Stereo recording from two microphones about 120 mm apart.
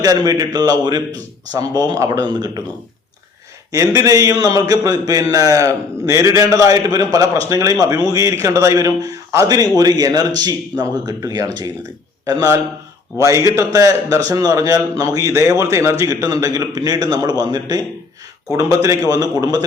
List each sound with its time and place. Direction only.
0.0 s a man's voice: 30° right (ahead or behind)
3.7 s a man's voice: 30° right (ahead or behind)